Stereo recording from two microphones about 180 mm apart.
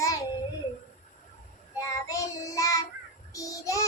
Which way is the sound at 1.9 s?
20° left (ahead or behind).